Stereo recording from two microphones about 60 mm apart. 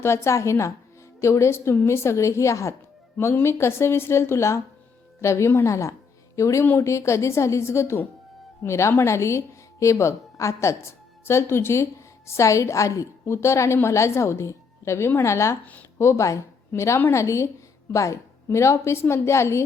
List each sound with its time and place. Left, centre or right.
0.0 s a woman's voice: left
5.6 s a woman's voice: left
13.3 s a woman's voice: left